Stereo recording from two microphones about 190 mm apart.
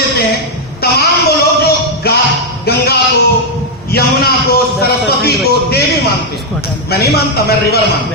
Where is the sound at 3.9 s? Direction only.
55° left (ahead or behind).